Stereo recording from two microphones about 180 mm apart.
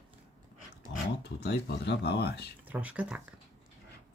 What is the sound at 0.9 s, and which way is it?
Speech, 75° left (ahead or behind).